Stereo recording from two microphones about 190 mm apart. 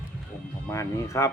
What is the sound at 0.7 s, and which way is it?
Speech, 15° left (ahead or behind).